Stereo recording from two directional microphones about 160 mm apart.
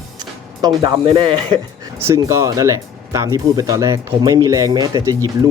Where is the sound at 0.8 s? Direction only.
30° right (ahead or behind).